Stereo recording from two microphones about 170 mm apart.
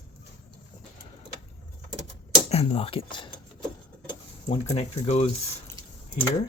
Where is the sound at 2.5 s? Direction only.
35° left (ahead or behind).